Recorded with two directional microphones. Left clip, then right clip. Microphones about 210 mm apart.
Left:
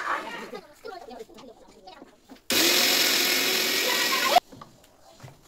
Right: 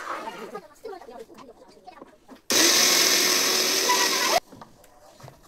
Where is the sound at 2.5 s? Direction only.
15° right (ahead or behind).